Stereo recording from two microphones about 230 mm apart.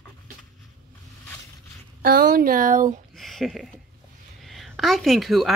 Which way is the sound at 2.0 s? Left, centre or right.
Right.